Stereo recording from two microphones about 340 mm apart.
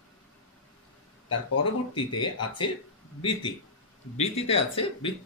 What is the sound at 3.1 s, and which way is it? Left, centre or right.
Speech, centre.